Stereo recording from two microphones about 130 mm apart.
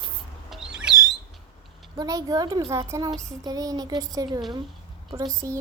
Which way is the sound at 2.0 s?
30° right (ahead or behind).